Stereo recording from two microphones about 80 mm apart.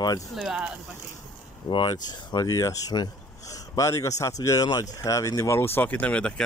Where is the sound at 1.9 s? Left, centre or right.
Left.